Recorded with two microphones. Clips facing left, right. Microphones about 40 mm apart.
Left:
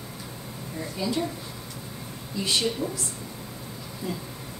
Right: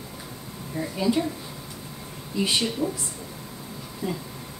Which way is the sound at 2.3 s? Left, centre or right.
Centre.